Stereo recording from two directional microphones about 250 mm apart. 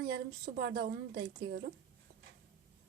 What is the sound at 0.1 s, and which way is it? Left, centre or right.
A woman's voice, right.